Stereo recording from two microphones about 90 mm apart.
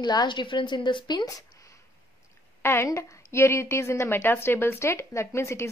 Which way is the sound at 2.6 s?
30° left (ahead or behind).